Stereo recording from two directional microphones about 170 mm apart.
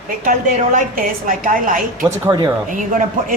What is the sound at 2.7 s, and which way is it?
Speech, 50° right (ahead or behind).